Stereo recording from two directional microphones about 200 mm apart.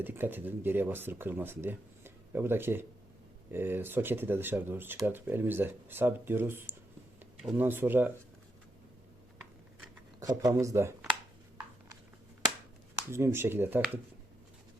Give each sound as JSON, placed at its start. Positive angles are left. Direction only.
{"t": 0.0, "sound": "speech", "side_deg": -10}
{"t": 10.2, "sound": "speech", "side_deg": -20}
{"t": 13.1, "sound": "speech", "side_deg": -15}